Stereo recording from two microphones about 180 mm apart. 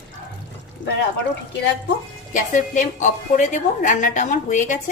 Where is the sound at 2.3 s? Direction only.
45° left (ahead or behind).